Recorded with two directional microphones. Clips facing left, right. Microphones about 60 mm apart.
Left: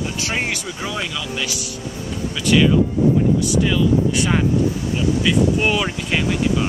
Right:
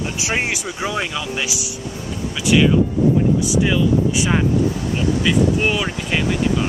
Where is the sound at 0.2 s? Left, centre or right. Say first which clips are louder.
Right 3 dB; centre.